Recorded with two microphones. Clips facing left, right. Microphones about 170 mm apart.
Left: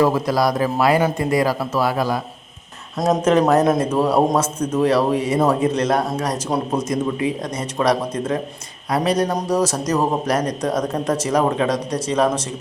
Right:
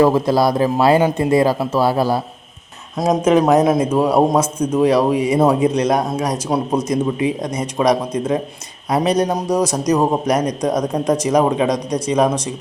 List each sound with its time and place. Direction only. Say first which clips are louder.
0.0 s a man's voice: right 3 dB; 25° right (ahead or behind)
3.0 s a man's voice: right 2 dB; 10° right (ahead or behind)